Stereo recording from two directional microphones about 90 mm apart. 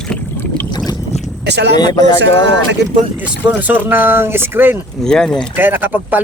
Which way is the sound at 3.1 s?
15° right (ahead or behind).